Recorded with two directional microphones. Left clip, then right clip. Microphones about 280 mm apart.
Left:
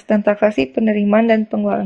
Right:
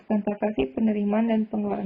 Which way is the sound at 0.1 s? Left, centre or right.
Left.